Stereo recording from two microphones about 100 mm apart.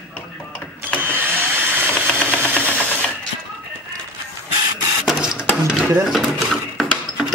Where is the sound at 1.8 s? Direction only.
20° right (ahead or behind).